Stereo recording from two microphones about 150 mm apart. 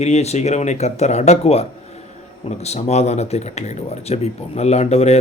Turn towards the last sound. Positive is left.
turn(degrees=45)  # may be behind; listen again after turning